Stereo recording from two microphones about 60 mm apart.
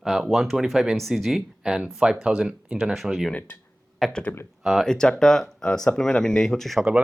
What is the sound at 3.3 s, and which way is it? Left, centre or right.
Speech, left.